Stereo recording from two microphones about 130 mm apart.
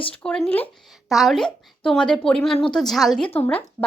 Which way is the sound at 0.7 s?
Centre (ahead or behind).